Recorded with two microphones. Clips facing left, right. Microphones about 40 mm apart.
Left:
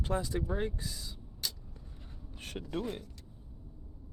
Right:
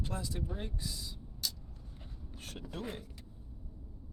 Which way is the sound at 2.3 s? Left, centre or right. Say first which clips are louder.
Left 5 dB; left.